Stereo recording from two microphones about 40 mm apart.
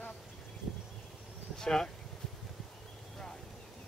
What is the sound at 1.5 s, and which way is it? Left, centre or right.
Speech, centre.